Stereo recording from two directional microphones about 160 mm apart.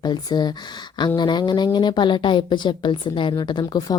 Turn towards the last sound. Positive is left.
turn(degrees=30)  # may be behind; listen again after turning